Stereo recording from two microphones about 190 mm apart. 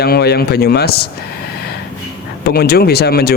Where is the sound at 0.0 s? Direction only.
55° left (ahead or behind).